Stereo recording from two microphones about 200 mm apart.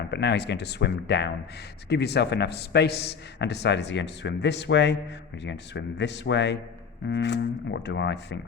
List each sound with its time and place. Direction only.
0.1 s a man's voice: 55° left (ahead or behind)